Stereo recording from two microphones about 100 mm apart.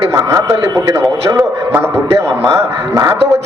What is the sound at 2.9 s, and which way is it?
Speech, 35° right (ahead or behind).